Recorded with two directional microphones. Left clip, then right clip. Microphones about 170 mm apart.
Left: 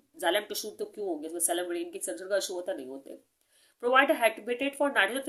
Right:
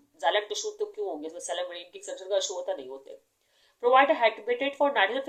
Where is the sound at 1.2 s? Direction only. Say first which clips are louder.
Left 1 dB; 35° left (ahead or behind).